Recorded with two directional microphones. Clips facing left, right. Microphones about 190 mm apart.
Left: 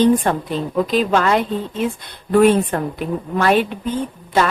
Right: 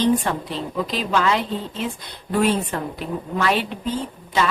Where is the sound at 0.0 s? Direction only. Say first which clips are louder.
Left 5 dB; 50° left (ahead or behind).